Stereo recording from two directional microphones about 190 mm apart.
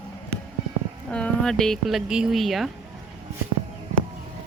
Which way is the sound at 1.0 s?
5° left (ahead or behind).